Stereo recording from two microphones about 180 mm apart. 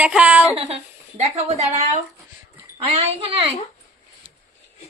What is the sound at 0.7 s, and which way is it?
Speech, 35° right (ahead or behind).